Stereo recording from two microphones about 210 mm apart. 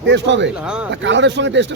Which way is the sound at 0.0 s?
60° right (ahead or behind).